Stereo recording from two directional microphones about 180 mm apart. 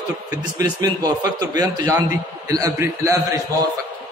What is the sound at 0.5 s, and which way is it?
A man's voice, 20° right (ahead or behind).